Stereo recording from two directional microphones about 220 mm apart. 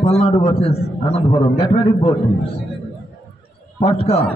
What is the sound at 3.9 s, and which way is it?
Speech, 25° left (ahead or behind).